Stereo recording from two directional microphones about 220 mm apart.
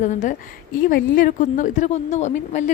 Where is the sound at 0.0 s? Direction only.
35° left (ahead or behind).